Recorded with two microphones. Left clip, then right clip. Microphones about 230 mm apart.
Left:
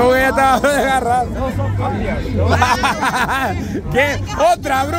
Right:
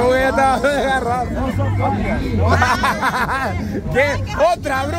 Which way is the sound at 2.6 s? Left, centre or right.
Centre.